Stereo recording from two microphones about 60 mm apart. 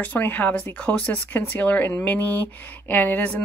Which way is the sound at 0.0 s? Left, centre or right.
Left.